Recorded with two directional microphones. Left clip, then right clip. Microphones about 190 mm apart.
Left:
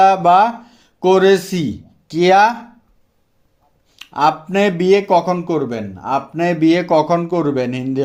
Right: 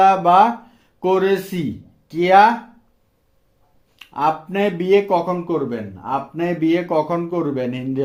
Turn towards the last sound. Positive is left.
turn(degrees=35)  # may be behind; listen again after turning